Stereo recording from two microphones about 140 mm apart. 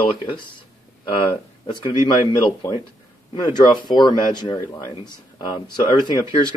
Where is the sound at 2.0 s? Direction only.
35° left (ahead or behind).